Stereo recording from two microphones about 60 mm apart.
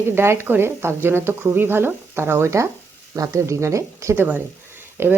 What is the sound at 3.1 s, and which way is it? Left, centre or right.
Speech, right.